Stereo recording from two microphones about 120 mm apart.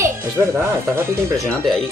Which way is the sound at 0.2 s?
20° right (ahead or behind).